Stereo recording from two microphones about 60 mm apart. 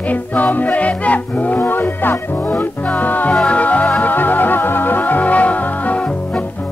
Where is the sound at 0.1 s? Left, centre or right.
Left.